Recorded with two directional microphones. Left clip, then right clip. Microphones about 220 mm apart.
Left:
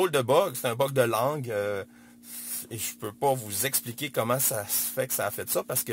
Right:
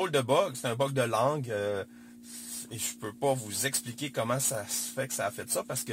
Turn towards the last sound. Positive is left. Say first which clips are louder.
# left 4 dB
turn(degrees=30)  # may be behind; listen again after turning